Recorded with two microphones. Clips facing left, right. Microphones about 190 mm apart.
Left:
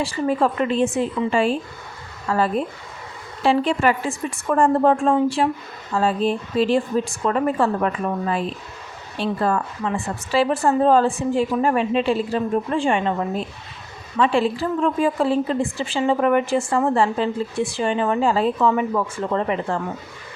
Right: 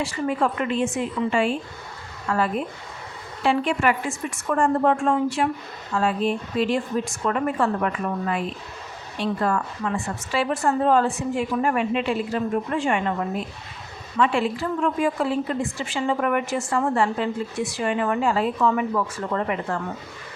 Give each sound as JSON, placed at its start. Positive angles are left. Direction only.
{"t": 0.0, "sound": "a woman's voice", "side_deg": 35}
{"t": 9.1, "sound": "a woman's voice", "side_deg": 30}